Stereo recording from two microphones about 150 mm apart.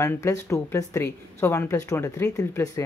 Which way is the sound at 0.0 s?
20° left (ahead or behind).